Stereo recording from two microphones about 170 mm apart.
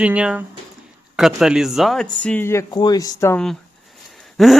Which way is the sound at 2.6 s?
25° left (ahead or behind).